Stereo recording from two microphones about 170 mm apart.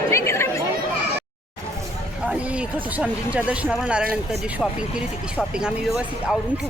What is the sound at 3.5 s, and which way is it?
A woman's voice, 5° right (ahead or behind).